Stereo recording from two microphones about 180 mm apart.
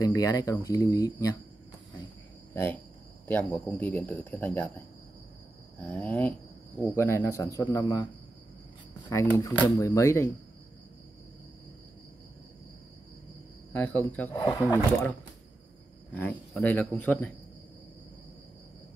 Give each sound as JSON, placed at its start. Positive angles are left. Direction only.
{"t": 0.0, "sound": "speech", "side_deg": 20}
{"t": 2.5, "sound": "speech", "side_deg": 10}
{"t": 3.5, "sound": "speech", "side_deg": 0}
{"t": 5.8, "sound": "speech", "side_deg": 10}
{"t": 9.1, "sound": "speech", "side_deg": 15}
{"t": 13.7, "sound": "speech", "side_deg": 10}